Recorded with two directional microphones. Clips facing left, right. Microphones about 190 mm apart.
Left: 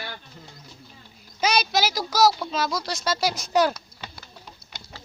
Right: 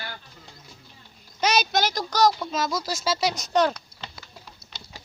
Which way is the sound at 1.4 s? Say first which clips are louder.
Even; centre (ahead or behind).